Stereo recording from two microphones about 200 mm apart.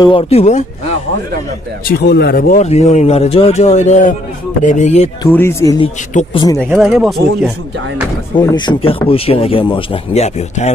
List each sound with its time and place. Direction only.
0.0 s speech: 25° left (ahead or behind)
1.9 s speech: 50° left (ahead or behind)
2.6 s speech: 35° left (ahead or behind)
5.3 s speech: 10° left (ahead or behind)
6.8 s speech: centre (ahead or behind)
8.4 s speech: 20° left (ahead or behind)